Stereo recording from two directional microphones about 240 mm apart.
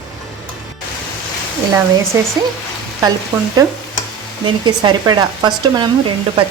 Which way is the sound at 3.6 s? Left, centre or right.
Centre.